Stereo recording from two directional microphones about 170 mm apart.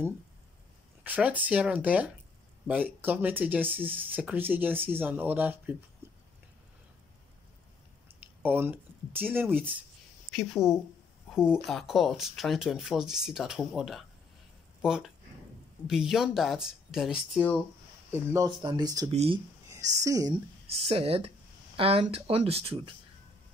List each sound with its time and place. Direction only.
1.0 s speech: 10° right (ahead or behind)
6.0 s a sound: 15° right (ahead or behind)
8.4 s speech: 10° right (ahead or behind)
10.3 s speech: centre (ahead or behind)
18.6 s speech: 25° right (ahead or behind)
19.0 s speech: 35° right (ahead or behind)
19.7 s a woman's voice: 20° right (ahead or behind)
20.6 s speech: 35° right (ahead or behind)